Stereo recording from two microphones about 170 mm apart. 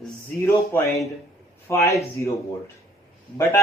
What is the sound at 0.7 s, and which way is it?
A man's voice, 15° left (ahead or behind).